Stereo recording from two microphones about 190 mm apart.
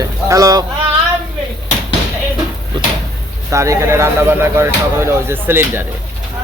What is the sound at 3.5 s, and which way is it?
Speech, 15° right (ahead or behind).